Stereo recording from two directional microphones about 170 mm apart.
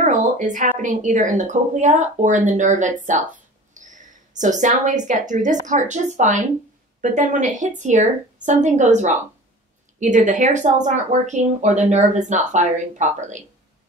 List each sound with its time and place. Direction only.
0.0 s a woman's voice: 45° right (ahead or behind)